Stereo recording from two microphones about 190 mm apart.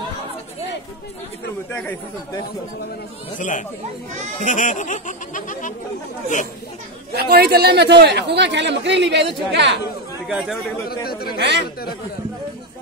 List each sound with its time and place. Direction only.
1.7 s speech: 10° left (ahead or behind)
3.3 s speech: 40° left (ahead or behind)
7.2 s a man's voice: 55° right (ahead or behind)
10.2 s speech: 5° right (ahead or behind)
11.1 s speech: 50° left (ahead or behind)